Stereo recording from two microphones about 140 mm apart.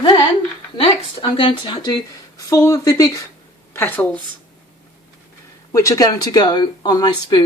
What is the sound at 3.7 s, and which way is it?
Speech, 15° left (ahead or behind).